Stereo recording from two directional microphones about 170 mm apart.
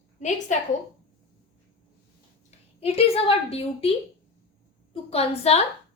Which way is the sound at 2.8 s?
35° left (ahead or behind).